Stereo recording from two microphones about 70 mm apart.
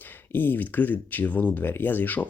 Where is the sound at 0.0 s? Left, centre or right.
Left.